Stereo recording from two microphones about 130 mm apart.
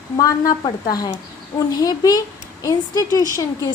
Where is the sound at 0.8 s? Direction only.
30° left (ahead or behind).